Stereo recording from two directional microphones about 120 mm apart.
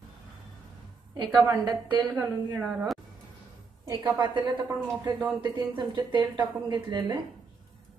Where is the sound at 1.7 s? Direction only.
40° right (ahead or behind).